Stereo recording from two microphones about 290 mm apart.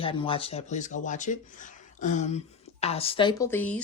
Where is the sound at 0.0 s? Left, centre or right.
Centre.